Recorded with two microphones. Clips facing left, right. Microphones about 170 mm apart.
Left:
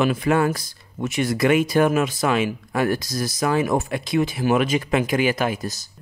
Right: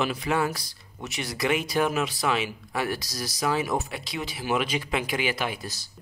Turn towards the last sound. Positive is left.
turn(degrees=45)  # may be behind; listen again after turning